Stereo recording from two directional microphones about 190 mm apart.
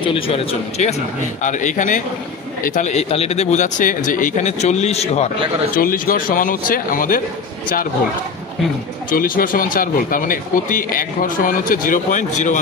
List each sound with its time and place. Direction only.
0.0 s speech: 30° left (ahead or behind)
5.8 s speech: 50° left (ahead or behind)
9.1 s speech: 50° left (ahead or behind)